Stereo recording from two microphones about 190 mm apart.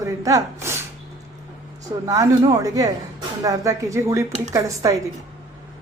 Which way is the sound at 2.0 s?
20° right (ahead or behind).